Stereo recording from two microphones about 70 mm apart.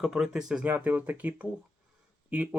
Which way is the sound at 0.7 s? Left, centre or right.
Right.